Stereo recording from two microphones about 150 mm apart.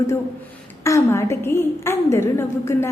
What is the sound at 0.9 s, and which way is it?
A woman's voice, 20° left (ahead or behind).